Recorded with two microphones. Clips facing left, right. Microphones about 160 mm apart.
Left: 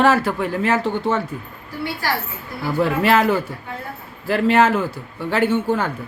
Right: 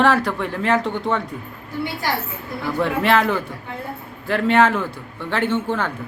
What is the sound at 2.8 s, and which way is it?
A man's voice, 5° left (ahead or behind).